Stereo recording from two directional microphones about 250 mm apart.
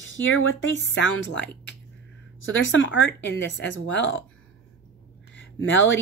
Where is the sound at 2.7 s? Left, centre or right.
Left.